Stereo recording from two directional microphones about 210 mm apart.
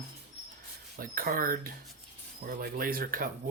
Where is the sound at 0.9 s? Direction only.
40° right (ahead or behind).